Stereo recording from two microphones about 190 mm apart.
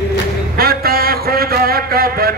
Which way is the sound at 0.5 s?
55° right (ahead or behind).